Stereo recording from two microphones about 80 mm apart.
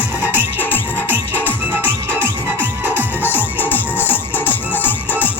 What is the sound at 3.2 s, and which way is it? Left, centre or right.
Music, left.